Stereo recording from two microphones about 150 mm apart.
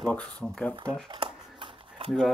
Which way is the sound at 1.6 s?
35° right (ahead or behind).